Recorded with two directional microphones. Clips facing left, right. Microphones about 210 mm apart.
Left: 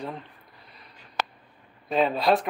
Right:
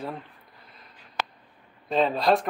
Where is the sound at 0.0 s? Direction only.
Centre (ahead or behind).